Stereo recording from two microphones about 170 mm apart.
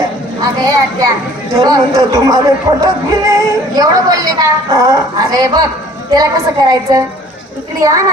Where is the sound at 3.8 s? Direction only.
20° right (ahead or behind).